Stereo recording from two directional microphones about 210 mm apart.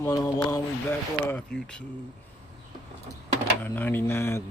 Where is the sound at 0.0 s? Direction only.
15° left (ahead or behind).